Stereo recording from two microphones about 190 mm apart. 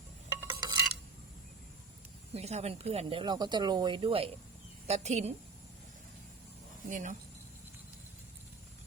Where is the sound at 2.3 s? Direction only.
35° right (ahead or behind).